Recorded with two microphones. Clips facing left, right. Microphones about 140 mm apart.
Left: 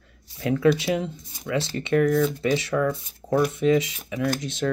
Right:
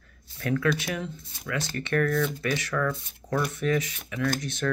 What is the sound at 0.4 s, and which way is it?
Speech, 20° left (ahead or behind).